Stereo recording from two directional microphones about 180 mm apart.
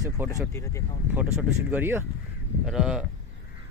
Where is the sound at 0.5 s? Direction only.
15° left (ahead or behind).